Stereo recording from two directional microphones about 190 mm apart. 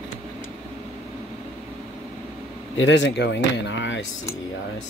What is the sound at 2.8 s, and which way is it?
Speech, 75° left (ahead or behind).